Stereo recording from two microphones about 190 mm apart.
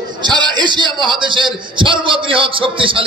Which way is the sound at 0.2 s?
25° right (ahead or behind).